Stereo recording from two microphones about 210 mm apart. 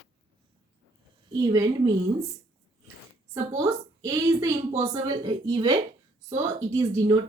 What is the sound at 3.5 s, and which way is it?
A woman's voice, 15° right (ahead or behind).